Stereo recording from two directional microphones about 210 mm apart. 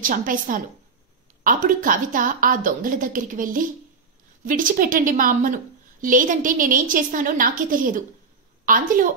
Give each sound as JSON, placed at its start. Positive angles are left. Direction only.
{"t": 0.0, "sound": "a woman's voice", "side_deg": -40}